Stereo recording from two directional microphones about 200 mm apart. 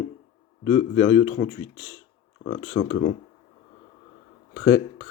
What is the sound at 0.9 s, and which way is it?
Speech, 40° left (ahead or behind).